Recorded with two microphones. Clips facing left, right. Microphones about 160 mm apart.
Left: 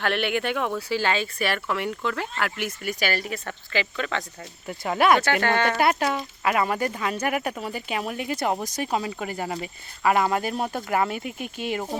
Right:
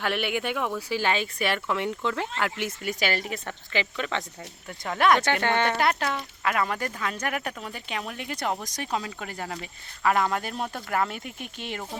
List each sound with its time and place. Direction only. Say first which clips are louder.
0.0 s speech: left 3 dB; 10° right (ahead or behind)
4.7 s speech: left 2 dB; 5° left (ahead or behind)